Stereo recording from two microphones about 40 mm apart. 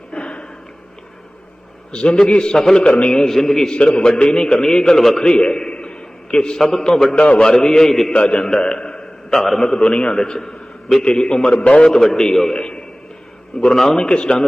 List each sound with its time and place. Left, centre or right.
0.1 s a sound: left
1.9 s a man's voice: left
2.6 s a man's voice: centre
2.8 s a man's voice: left
3.2 s a man's voice: centre
3.7 s a man's voice: left
5.2 s a man's voice: left
7.2 s a man's voice: left
7.4 s a man's voice: centre
8.1 s a man's voice: left
11.9 s a man's voice: centre
13.6 s a man's voice: centre